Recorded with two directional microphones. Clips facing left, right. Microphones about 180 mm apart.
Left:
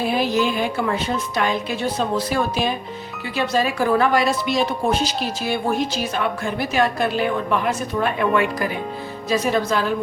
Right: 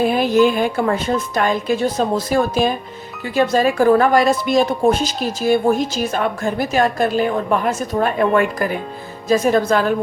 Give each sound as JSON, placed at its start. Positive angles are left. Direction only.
{"t": 0.0, "sound": "speech", "side_deg": -50}